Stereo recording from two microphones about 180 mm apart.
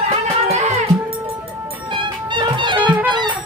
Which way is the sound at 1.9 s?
25° right (ahead or behind).